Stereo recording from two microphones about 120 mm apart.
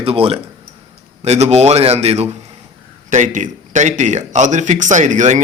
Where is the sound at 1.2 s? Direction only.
65° right (ahead or behind).